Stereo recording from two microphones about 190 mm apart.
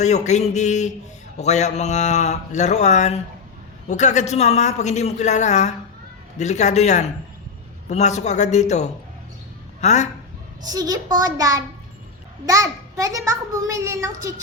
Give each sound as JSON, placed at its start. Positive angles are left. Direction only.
{"t": 0.0, "sound": "a man's voice", "side_deg": 35}
{"t": 10.6, "sound": "a woman's voice", "side_deg": -20}